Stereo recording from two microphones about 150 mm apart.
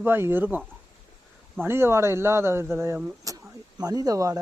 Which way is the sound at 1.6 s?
15° right (ahead or behind).